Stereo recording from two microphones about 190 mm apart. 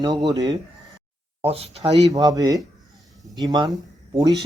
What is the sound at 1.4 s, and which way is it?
Speech, 30° right (ahead or behind).